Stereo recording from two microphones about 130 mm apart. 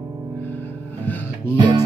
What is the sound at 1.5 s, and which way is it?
Music, 30° right (ahead or behind).